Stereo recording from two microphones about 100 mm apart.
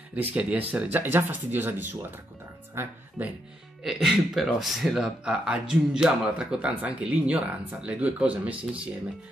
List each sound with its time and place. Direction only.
0.3 s speech: 15° right (ahead or behind)
3.8 s speech: centre (ahead or behind)